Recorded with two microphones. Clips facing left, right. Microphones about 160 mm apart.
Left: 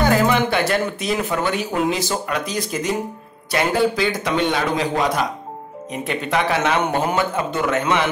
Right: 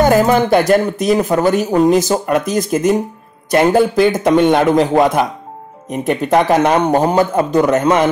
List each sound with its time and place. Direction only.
0.0 s a man's voice: 45° right (ahead or behind)